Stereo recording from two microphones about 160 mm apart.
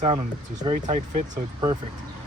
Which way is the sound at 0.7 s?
50° right (ahead or behind).